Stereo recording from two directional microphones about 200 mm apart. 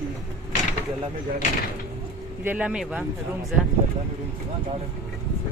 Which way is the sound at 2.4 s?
5° right (ahead or behind).